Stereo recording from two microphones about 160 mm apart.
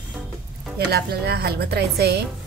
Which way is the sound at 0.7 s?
80° right.